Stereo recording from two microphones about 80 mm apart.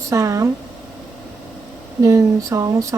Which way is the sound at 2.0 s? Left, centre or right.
Right.